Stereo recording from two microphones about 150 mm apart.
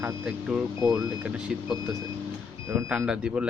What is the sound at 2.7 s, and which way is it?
Speech, 20° right (ahead or behind).